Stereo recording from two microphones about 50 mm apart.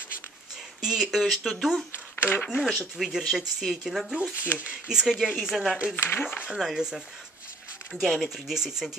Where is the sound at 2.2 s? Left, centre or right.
Left.